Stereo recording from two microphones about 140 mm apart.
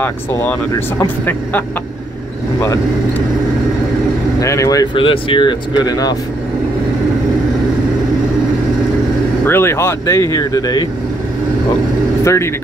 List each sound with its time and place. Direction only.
0.0 s speech: 15° left (ahead or behind)
4.4 s speech: 25° left (ahead or behind)
4.9 s speech: 40° left (ahead or behind)
9.5 s speech: 15° left (ahead or behind)